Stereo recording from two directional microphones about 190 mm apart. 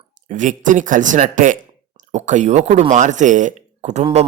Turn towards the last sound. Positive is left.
turn(degrees=-35)  # may be behind; listen again after turning